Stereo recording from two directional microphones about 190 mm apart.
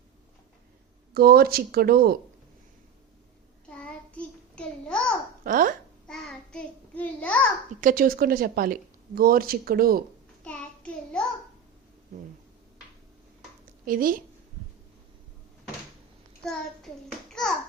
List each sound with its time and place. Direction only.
1.1 s speech: 55° right (ahead or behind)
3.7 s child singing: 5° left (ahead or behind)
5.4 s speech: 45° right (ahead or behind)
6.1 s child singing: 5° left (ahead or behind)
7.8 s speech: 45° right (ahead or behind)
10.4 s child singing: 5° left (ahead or behind)
13.8 s speech: 50° right (ahead or behind)
16.4 s a child's voice: 5° left (ahead or behind)